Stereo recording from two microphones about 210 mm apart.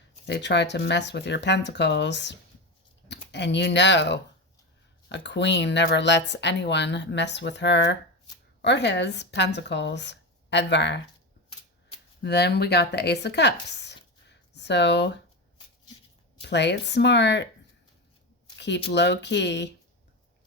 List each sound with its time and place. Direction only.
0.3 s speech: 55° left (ahead or behind)
12.2 s speech: 50° left (ahead or behind)
16.4 s speech: 55° left (ahead or behind)
18.5 s a sound: 55° left (ahead or behind)
18.9 s speech: 55° left (ahead or behind)